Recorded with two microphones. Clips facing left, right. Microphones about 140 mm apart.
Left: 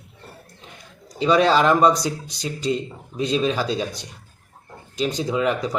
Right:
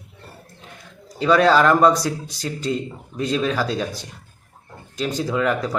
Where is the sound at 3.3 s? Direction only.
25° left (ahead or behind).